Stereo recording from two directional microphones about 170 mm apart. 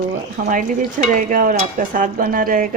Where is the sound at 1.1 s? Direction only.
50° right (ahead or behind).